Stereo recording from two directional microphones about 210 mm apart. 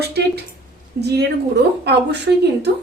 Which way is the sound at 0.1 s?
50° right (ahead or behind).